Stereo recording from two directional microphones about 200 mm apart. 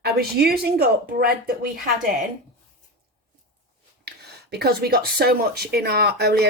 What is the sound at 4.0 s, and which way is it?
Speech, 55° right (ahead or behind).